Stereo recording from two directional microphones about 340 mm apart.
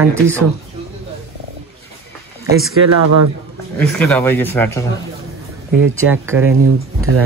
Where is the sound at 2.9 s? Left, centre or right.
Right.